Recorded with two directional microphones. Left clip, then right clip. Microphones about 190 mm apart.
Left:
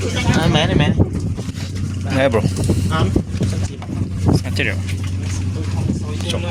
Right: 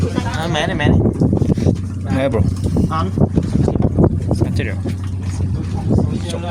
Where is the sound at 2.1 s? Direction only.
5° right (ahead or behind).